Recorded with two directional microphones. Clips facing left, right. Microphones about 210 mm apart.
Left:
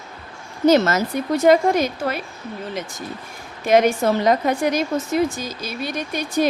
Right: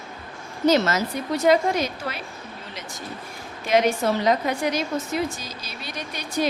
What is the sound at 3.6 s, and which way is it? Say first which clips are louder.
A woman's voice: left 4 dB; 50° left (ahead or behind).